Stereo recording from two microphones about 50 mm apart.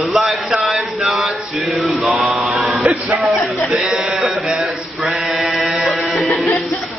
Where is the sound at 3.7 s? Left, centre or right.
Centre.